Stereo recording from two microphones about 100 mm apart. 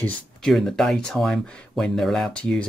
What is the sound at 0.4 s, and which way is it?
Speech, 5° left (ahead or behind).